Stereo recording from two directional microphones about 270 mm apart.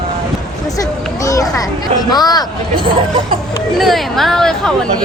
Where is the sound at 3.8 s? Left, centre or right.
Centre.